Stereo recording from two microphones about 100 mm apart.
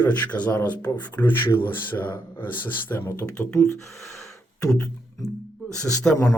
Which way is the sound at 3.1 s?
30° left (ahead or behind).